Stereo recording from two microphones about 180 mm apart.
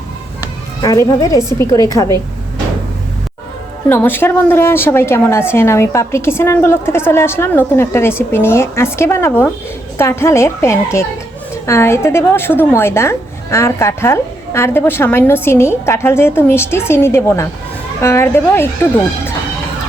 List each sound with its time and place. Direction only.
0.8 s a woman's voice: 20° left (ahead or behind)
3.8 s a woman's voice: 10° left (ahead or behind)